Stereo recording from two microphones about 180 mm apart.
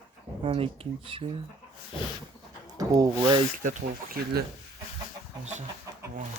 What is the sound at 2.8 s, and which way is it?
Speech, 20° right (ahead or behind).